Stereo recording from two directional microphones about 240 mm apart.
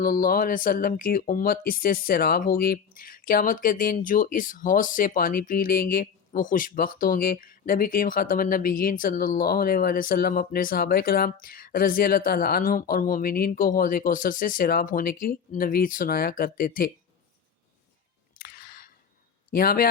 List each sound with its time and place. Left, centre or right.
0.0 s speech: left
18.3 s a sound: left
19.5 s speech: left